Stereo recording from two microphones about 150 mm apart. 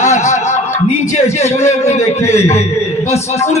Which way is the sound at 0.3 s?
50° left (ahead or behind).